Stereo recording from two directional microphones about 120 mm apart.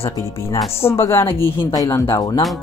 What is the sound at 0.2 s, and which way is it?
Speech, 25° left (ahead or behind).